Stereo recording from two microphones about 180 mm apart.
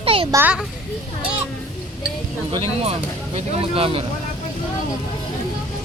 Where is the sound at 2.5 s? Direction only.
35° right (ahead or behind).